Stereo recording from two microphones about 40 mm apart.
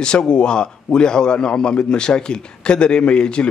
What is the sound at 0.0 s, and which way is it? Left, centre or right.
A man's voice, left.